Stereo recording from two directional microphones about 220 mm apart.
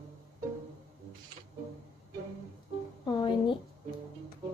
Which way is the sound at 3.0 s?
20° left (ahead or behind).